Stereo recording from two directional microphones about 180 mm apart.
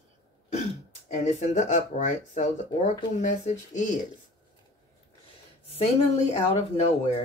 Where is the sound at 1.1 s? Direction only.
40° left (ahead or behind).